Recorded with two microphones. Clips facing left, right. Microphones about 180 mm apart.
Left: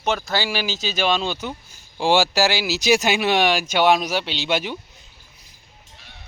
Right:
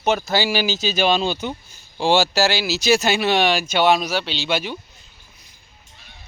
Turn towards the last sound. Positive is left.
turn(degrees=15)  # may be behind; listen again after turning